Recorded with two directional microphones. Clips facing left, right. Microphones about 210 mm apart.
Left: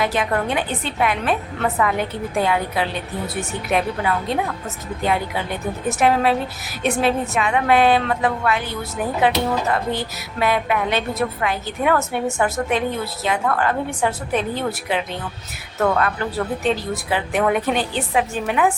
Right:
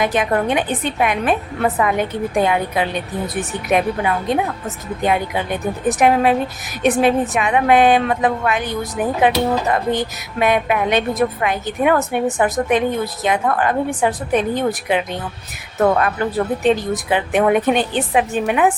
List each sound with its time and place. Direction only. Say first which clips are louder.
0.0 s a woman's voice: right 3 dB; 20° right (ahead or behind)
16.6 s a woman's voice: right 6 dB; 20° right (ahead or behind)